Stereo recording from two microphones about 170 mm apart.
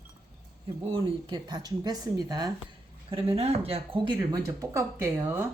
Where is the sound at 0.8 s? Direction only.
30° right (ahead or behind).